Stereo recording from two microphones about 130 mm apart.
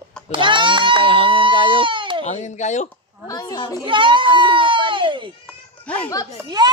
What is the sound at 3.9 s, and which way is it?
A child's voice, 40° right (ahead or behind).